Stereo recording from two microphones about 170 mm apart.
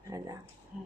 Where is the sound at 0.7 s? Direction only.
5° right (ahead or behind).